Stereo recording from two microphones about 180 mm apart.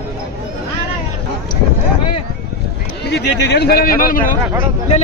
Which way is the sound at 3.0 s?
70° left (ahead or behind).